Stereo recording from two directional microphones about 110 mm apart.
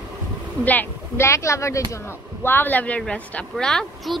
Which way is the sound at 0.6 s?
15° left (ahead or behind).